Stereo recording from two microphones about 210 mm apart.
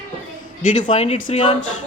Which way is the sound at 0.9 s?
30° left (ahead or behind).